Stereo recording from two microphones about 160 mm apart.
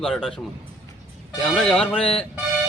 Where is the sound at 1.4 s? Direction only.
5° left (ahead or behind).